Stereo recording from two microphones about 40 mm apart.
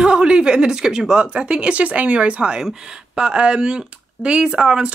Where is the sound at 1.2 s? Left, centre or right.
Right.